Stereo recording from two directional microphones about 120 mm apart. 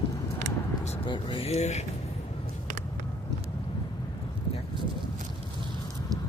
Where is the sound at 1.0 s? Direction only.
45° left (ahead or behind); by 1.8 s 70° left (ahead or behind).